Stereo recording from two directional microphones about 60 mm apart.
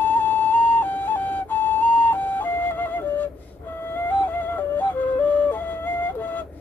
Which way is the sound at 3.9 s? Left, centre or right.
Left.